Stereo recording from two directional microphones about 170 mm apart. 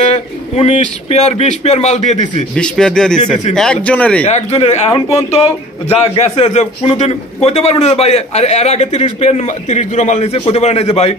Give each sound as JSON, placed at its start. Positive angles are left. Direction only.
{"t": 0.0, "sound": "a man's voice", "side_deg": 40}
{"t": 2.5, "sound": "speech", "side_deg": 5}
{"t": 4.3, "sound": "a man's voice", "side_deg": 40}